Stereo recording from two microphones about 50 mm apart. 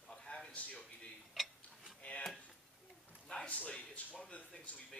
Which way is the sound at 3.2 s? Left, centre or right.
Left.